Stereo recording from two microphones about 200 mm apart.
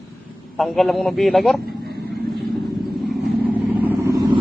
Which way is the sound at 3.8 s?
10° right (ahead or behind).